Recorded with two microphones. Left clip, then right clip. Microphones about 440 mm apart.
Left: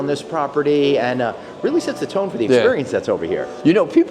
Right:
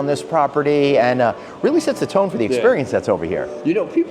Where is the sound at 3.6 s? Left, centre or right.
Left.